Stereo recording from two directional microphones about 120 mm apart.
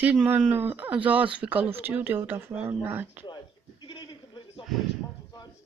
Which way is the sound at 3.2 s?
35° left (ahead or behind).